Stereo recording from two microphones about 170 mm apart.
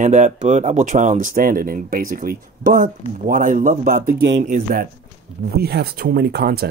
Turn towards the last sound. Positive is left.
turn(degrees=-70)  # may be behind; listen again after turning